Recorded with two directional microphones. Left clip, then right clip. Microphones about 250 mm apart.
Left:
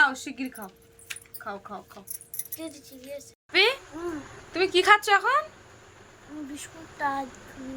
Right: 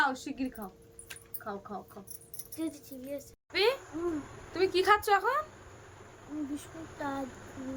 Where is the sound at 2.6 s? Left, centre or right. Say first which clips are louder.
Right 3 dB; right.